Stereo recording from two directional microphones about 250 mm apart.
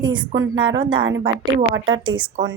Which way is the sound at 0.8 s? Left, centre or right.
Centre.